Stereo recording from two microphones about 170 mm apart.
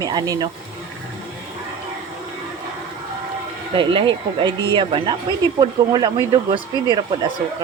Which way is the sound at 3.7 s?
30° right (ahead or behind).